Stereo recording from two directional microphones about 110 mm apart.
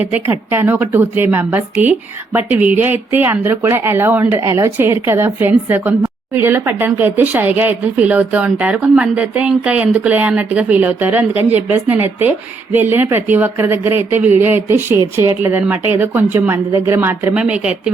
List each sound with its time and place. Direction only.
0.0 s speech: 15° right (ahead or behind)
17.3 s speech: 10° right (ahead or behind)